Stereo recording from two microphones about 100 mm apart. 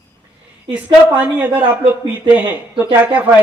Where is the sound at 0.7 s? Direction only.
15° right (ahead or behind).